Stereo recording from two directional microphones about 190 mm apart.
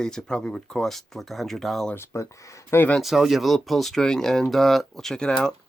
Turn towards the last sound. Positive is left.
turn(degrees=5)  # may be behind; listen again after turning